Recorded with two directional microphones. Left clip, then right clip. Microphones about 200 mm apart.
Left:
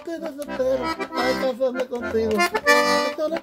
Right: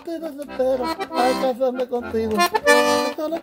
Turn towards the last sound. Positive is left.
turn(degrees=5)  # may be behind; listen again after turning